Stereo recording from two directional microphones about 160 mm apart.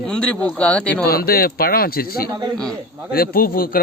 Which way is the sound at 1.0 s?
70° left (ahead or behind).